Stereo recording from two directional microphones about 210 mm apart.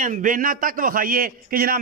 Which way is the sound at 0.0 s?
40° right (ahead or behind).